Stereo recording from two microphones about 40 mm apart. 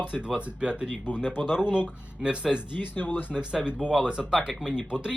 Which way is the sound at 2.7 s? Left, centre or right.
Left.